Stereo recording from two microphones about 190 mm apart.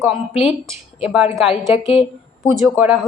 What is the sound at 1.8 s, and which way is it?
Speech, 30° left (ahead or behind).